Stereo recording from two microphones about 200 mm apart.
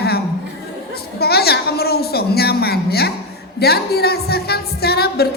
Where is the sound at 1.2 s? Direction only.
50° left (ahead or behind).